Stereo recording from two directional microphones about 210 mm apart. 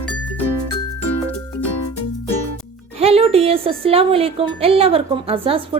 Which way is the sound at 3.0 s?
30° right (ahead or behind).